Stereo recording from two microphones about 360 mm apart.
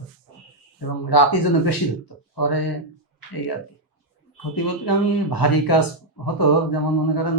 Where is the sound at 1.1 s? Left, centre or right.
Left.